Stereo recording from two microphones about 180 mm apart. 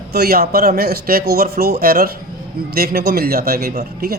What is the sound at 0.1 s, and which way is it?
A man's voice, 60° right (ahead or behind).